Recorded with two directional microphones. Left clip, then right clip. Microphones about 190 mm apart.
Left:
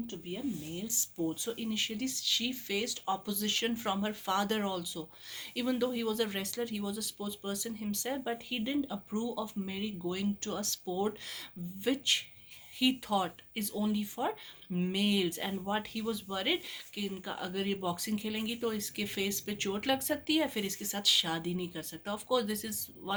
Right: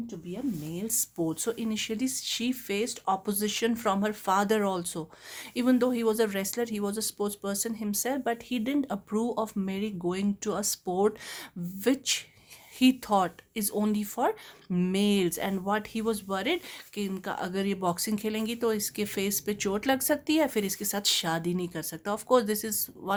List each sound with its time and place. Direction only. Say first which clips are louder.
0.8 s speech: right 2 dB; 60° right (ahead or behind)